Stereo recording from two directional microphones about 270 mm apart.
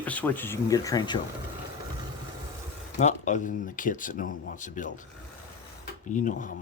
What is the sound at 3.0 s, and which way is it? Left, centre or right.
Speech, left.